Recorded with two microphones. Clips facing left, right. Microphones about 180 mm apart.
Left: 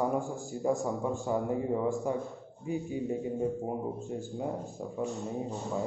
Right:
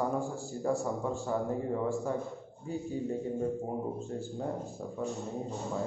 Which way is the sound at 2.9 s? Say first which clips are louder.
Right 2 dB; 15° left (ahead or behind).